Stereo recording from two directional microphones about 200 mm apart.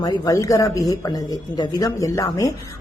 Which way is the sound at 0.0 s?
20° left (ahead or behind).